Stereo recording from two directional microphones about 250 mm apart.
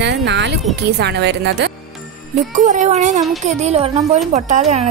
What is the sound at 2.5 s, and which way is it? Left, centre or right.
Speech, right.